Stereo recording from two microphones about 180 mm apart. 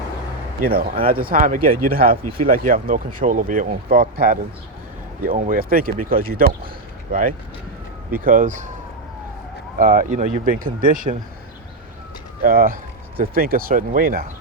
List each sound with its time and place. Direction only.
0.6 s speech: 55° right (ahead or behind)
9.7 s speech: 50° right (ahead or behind)
12.4 s speech: 50° right (ahead or behind)